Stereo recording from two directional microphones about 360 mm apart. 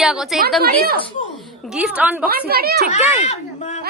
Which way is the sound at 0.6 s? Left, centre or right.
Right.